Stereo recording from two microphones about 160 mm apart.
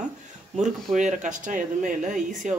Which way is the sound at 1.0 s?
50° right (ahead or behind).